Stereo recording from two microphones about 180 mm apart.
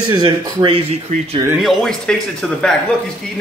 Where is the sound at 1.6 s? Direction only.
Centre (ahead or behind).